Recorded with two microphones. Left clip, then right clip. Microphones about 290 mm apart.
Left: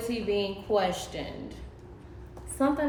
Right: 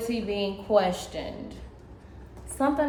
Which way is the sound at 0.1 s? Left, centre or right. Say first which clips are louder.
Left 3 dB; centre.